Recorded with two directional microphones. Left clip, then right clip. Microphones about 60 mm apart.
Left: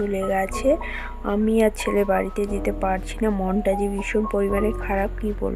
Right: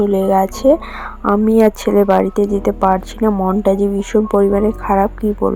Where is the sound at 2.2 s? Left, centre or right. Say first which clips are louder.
Right 10 dB; right.